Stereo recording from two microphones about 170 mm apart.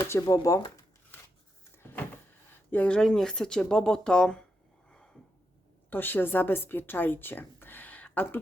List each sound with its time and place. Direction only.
0.0 s speech: 20° left (ahead or behind)
1.7 s a sound: 10° left (ahead or behind)
2.6 s speech: 10° left (ahead or behind)
4.9 s gasp: 5° left (ahead or behind)
5.9 s a woman's voice: 10° left (ahead or behind)